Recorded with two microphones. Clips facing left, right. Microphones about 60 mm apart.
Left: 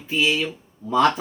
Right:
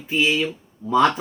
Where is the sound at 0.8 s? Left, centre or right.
Right.